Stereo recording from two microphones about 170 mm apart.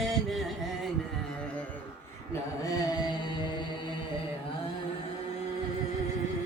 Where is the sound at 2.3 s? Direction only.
20° left (ahead or behind).